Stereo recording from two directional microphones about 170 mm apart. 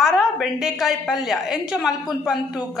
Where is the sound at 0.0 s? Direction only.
Centre (ahead or behind).